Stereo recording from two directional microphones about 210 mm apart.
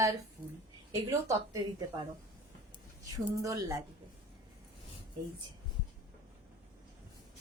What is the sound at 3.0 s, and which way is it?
Speech, 15° right (ahead or behind).